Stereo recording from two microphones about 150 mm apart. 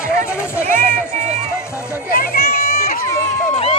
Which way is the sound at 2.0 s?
75° left (ahead or behind).